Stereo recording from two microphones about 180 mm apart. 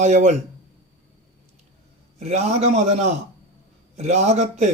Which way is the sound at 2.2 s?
35° right (ahead or behind).